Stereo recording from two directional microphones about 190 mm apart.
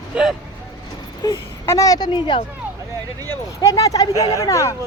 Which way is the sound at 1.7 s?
20° left (ahead or behind).